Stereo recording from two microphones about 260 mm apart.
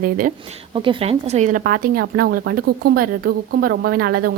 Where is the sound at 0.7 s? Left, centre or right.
Centre.